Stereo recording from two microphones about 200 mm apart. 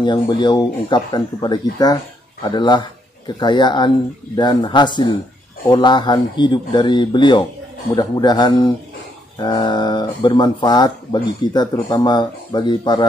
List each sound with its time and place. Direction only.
0.0 s speech: 25° left (ahead or behind)